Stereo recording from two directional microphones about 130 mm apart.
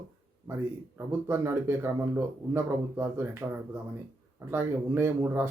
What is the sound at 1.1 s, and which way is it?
Speech, 20° right (ahead or behind).